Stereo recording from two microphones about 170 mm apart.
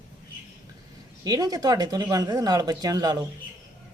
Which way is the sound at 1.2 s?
20° right (ahead or behind).